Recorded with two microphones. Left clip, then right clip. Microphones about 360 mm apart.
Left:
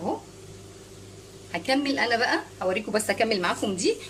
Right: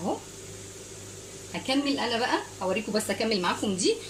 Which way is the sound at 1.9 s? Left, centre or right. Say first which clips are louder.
Left 3 dB; left.